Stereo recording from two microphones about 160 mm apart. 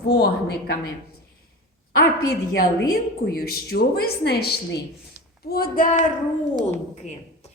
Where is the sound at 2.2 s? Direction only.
75° left (ahead or behind).